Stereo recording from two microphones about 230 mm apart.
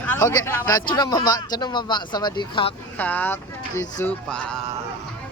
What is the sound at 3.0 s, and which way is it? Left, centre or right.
Speech, centre.